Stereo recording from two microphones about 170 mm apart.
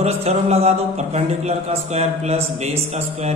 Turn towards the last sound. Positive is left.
turn(degrees=-40)  # may be behind; listen again after turning